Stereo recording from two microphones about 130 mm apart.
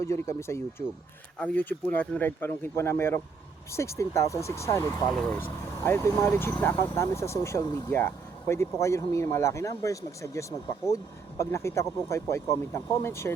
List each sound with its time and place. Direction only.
0.0 s speech: 20° left (ahead or behind)